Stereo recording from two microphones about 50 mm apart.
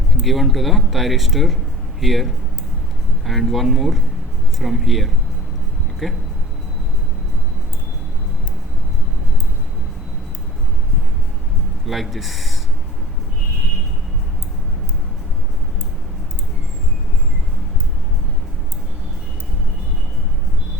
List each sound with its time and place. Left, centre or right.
0.2 s speech: centre
11.9 s speech: centre